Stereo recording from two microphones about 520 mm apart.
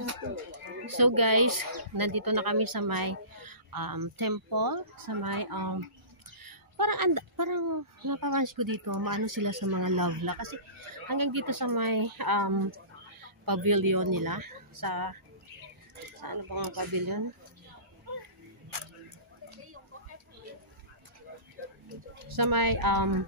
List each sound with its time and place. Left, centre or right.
0.0 s a sound: right
0.8 s a woman's voice: right
16.2 s speech: right
22.3 s speech: right